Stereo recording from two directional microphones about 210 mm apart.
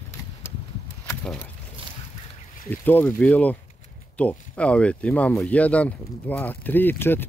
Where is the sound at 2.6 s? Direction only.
10° left (ahead or behind).